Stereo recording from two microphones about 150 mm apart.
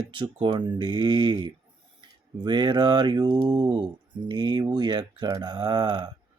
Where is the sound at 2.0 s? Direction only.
30° right (ahead or behind).